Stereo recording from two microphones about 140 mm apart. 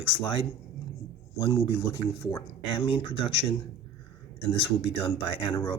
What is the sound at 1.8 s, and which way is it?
Speech, 30° left (ahead or behind).